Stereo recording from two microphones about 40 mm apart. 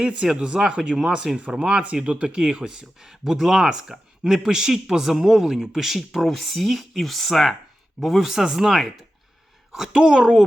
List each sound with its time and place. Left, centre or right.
0.0 s speech: right
0.9 s speech: centre
1.5 s speech: right; by 7.5 s centre
8.0 s speech: centre
9.9 s speech: right